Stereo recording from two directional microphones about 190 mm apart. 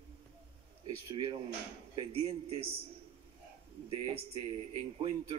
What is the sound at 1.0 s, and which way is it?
A man's voice, 30° right (ahead or behind).